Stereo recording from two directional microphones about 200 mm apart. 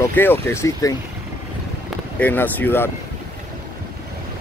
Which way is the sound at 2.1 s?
10° left (ahead or behind).